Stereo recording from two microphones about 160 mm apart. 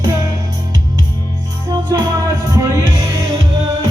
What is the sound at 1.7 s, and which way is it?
Music, 25° right (ahead or behind).